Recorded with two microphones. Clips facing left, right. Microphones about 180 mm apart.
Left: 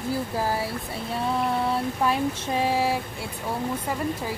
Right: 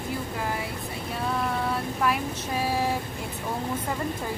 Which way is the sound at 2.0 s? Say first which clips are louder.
Left 2 dB; 25° left (ahead or behind).